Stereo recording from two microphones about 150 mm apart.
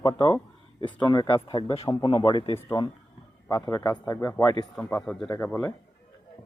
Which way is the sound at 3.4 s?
25° left (ahead or behind).